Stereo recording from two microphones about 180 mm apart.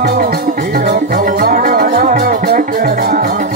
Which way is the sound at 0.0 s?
50° right (ahead or behind).